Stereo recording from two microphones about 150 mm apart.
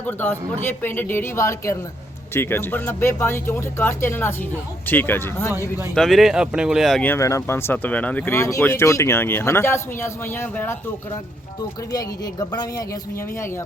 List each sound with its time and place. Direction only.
0.1 s speech: 15° left (ahead or behind)
5.9 s speech: centre (ahead or behind)
7.0 s speech: 15° left (ahead or behind)
11.9 s speech: 25° left (ahead or behind)